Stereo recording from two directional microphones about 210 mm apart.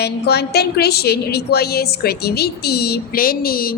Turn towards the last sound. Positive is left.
turn(degrees=45)  # may be behind; listen again after turning